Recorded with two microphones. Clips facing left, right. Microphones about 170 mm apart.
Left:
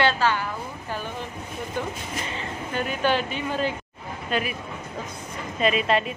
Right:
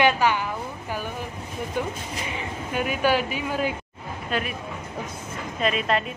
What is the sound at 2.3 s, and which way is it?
Speech, 10° right (ahead or behind).